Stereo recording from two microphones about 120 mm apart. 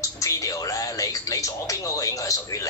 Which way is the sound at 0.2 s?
25° left (ahead or behind).